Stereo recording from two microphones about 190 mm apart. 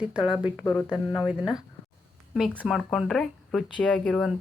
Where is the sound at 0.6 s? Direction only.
20° left (ahead or behind).